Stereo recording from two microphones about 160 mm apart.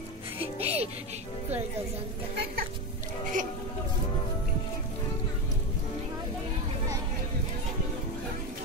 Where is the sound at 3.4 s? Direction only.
55° right (ahead or behind).